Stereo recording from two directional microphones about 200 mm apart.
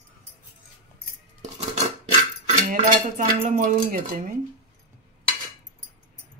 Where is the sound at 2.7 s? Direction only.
40° right (ahead or behind).